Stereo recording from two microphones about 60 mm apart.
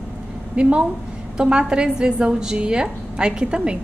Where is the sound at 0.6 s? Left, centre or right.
Centre.